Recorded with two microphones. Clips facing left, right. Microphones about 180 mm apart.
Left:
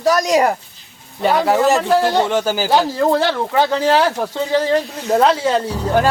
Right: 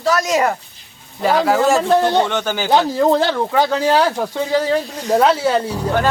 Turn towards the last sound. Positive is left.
turn(degrees=-10)  # may be behind; listen again after turning